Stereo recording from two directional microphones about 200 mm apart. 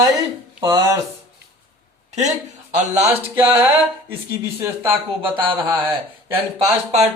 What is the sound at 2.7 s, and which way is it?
Speech, 35° right (ahead or behind).